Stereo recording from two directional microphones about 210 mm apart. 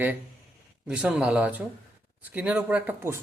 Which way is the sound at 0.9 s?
5° right (ahead or behind).